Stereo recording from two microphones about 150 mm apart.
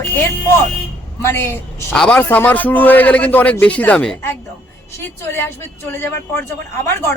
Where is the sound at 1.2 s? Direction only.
15° left (ahead or behind).